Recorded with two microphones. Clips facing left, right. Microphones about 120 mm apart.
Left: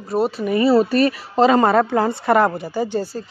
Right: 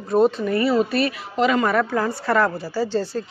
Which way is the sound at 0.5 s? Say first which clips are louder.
Left 9 dB; 35° left (ahead or behind).